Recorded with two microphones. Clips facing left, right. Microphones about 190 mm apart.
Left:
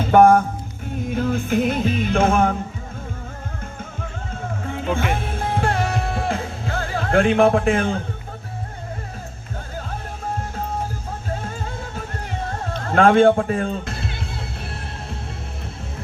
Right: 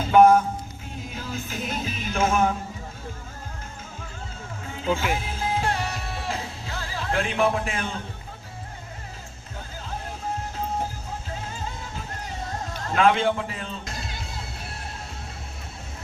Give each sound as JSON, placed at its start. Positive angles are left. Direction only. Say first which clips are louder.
{"t": 0.0, "sound": "music", "louder": "left 3 dB", "side_deg": 55}
{"t": 4.7, "sound": "music", "louder": "left 2 dB", "side_deg": 55}
{"t": 12.6, "sound": "speech", "louder": "left 5 dB", "side_deg": 60}